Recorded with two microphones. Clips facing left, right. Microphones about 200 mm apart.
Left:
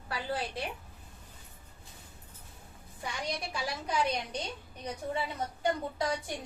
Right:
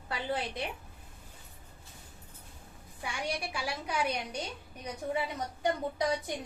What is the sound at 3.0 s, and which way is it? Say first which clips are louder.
A woman's voice: right 1 dB; 10° right (ahead or behind).